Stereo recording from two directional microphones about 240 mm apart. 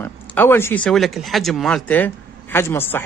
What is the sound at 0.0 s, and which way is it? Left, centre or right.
Speech, centre.